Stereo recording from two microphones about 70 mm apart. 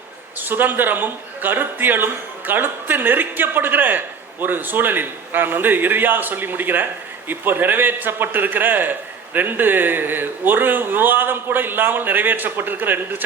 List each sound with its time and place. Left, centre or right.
0.3 s a man's voice: right